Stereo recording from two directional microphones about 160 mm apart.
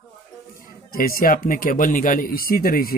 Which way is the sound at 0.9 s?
65° left (ahead or behind).